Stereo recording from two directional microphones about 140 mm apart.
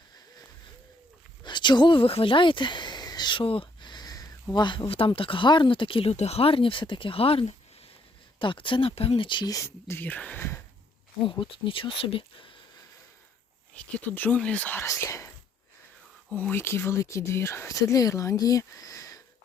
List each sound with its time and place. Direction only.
1.5 s a sound: 35° left (ahead or behind)
4.5 s speech: 35° left (ahead or behind); by 10.6 s 15° left (ahead or behind)
11.2 s speech: 35° left (ahead or behind)
13.7 s speech: 10° left (ahead or behind)
16.3 s speech: 10° left (ahead or behind)